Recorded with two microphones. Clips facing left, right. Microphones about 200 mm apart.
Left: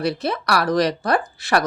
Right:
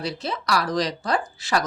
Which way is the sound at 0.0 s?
60° left (ahead or behind).